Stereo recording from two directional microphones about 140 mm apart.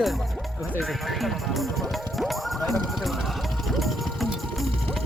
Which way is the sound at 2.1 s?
Centre (ahead or behind).